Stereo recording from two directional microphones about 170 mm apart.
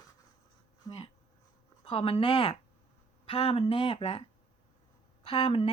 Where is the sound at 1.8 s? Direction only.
35° left (ahead or behind).